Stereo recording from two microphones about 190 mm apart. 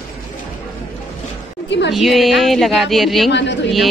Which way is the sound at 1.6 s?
65° left (ahead or behind).